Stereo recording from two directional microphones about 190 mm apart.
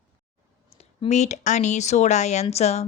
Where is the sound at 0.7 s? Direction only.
30° left (ahead or behind).